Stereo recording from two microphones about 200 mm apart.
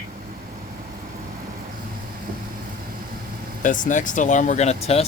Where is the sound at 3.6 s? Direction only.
40° left (ahead or behind).